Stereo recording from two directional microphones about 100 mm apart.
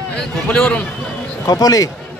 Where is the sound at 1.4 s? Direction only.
40° left (ahead or behind).